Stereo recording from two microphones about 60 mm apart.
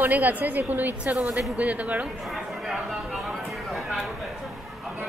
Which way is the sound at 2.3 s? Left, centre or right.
Centre.